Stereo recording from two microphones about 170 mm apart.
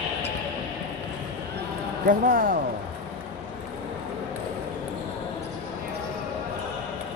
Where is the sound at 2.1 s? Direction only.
55° right (ahead or behind).